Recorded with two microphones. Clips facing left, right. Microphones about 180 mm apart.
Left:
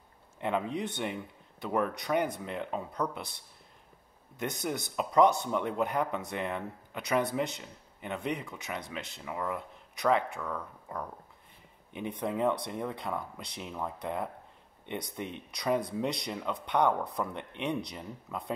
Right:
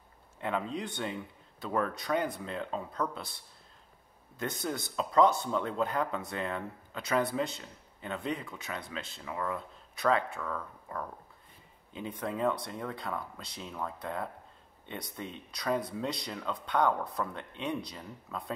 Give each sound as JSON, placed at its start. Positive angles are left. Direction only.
{"t": 0.4, "sound": "speech", "side_deg": 20}